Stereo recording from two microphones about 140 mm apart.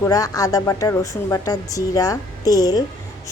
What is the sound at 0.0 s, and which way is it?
Speech, 25° left (ahead or behind).